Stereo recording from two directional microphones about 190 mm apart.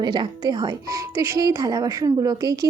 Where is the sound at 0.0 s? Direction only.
25° right (ahead or behind).